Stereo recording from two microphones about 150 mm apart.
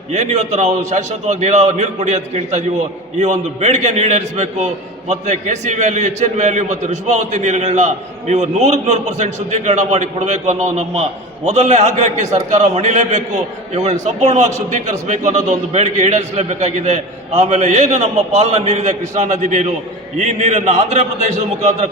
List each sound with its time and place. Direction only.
0.1 s a man's voice: 50° right (ahead or behind)